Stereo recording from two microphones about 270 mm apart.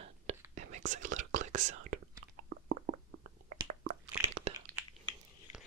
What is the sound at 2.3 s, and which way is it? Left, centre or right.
Squish, right.